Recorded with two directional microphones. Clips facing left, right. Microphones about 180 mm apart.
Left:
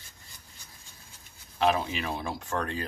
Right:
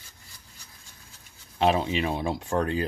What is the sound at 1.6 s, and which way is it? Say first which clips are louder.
Speech: right 3 dB; 30° right (ahead or behind).